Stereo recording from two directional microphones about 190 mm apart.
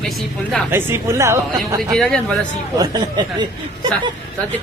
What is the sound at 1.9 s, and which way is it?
Speech, 5° left (ahead or behind).